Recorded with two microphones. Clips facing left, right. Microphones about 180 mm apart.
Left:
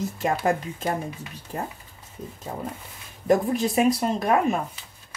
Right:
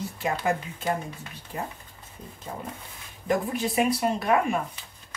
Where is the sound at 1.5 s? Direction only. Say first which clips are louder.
Left 2 dB; 45° left (ahead or behind).